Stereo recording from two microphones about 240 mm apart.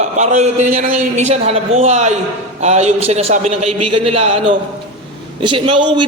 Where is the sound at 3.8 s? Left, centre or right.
Right.